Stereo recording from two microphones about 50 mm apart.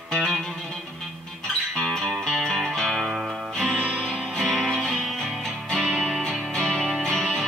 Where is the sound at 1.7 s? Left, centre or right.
Centre.